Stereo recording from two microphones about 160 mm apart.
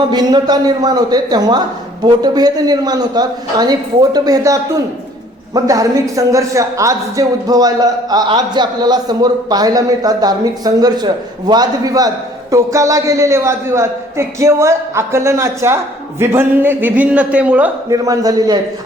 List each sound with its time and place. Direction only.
0.1 s speech: 25° right (ahead or behind); by 17.7 s 10° right (ahead or behind)
17.8 s speech: 20° right (ahead or behind)